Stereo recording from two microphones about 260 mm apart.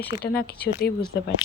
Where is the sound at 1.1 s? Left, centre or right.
Left.